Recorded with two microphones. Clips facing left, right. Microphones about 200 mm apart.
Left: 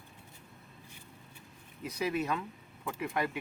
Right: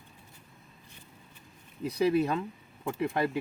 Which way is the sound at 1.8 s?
30° right (ahead or behind).